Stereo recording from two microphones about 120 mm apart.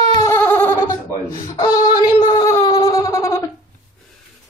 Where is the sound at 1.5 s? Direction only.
35° left (ahead or behind).